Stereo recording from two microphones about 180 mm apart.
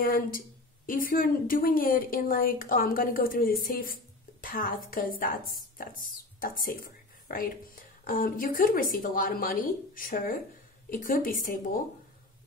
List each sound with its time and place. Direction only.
0.0 s a woman's voice: 50° left (ahead or behind)